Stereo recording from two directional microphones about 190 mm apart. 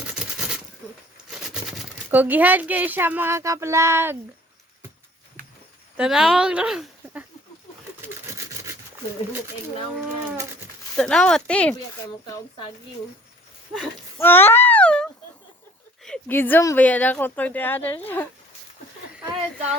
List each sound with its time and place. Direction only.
2.0 s speech: 10° right (ahead or behind)
6.0 s speech: 5° right (ahead or behind)
10.9 s speech: 5° left (ahead or behind)
12.2 s speech: 25° left (ahead or behind)
14.2 s a sound: 10° left (ahead or behind)
16.0 s a woman's voice: 5° left (ahead or behind)